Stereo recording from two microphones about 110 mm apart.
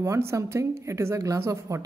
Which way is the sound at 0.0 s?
25° right (ahead or behind).